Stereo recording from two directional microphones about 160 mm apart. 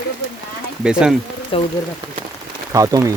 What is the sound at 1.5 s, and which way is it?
Speech, 35° left (ahead or behind).